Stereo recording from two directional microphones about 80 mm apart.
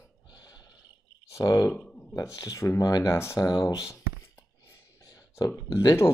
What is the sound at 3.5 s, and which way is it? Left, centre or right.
Speech, left.